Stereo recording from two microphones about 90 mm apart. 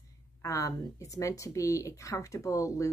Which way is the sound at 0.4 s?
35° left (ahead or behind).